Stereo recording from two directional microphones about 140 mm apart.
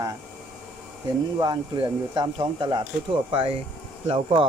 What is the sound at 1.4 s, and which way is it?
Speech, 30° right (ahead or behind).